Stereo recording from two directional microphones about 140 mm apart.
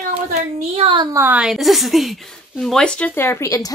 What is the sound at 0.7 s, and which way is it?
Speech, 45° right (ahead or behind).